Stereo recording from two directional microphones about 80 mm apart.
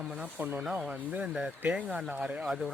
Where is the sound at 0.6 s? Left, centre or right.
Centre.